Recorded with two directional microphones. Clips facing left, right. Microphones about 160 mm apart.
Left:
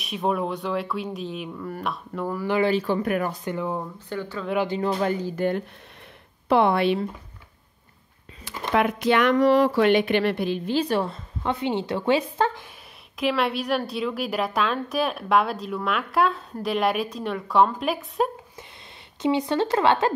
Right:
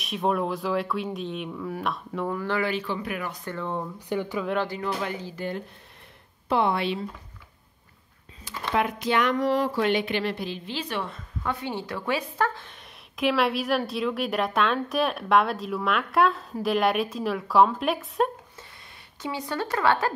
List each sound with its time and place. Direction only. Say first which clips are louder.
0.0 s a woman's voice: even; centre (ahead or behind)
2.6 s speech: left 6 dB; 35° left (ahead or behind)
2.9 s speech: left 7 dB; 50° left (ahead or behind)
3.4 s speech: left 3 dB; 10° left (ahead or behind)
4.1 s a woman's voice: right 3 dB; 15° right (ahead or behind)
5.0 s speech: left 7 dB; 50° left (ahead or behind)
8.7 s speech: left 4 dB; 65° left (ahead or behind); by 11.1 s 40° left (ahead or behind)
11.4 s a woman's voice: left 5 dB; 25° left (ahead or behind)
13.1 s a woman's voice: even; centre (ahead or behind)
19.2 s a woman's voice: left 8 dB; 20° left (ahead or behind)